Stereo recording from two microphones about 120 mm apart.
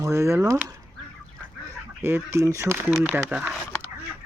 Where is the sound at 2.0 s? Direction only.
20° right (ahead or behind).